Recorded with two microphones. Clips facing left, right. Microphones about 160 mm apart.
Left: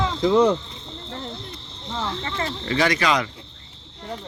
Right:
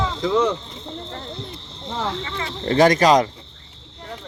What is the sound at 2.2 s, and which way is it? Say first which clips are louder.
Speech: left 2 dB; 45° left (ahead or behind).